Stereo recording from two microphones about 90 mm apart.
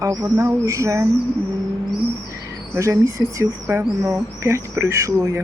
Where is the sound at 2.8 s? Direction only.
35° right (ahead or behind).